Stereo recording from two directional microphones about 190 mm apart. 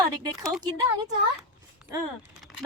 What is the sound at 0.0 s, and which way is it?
Speech, 20° right (ahead or behind).